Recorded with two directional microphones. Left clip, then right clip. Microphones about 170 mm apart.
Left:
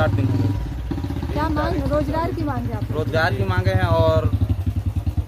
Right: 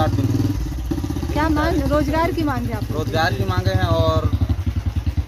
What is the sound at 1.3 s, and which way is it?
Speech, 35° right (ahead or behind).